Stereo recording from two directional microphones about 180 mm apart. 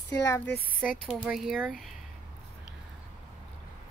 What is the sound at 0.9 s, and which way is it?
Speech, 5° left (ahead or behind).